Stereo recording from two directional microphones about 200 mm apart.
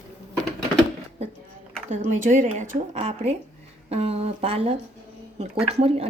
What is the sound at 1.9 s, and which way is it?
A woman's voice, 40° right (ahead or behind).